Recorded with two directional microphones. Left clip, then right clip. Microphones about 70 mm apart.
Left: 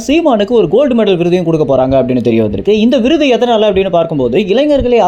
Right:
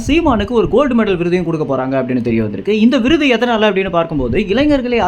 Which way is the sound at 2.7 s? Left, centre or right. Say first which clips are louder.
Left 2 dB; left.